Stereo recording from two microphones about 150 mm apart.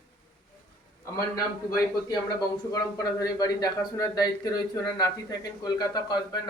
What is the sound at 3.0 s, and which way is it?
A man's voice, 25° left (ahead or behind).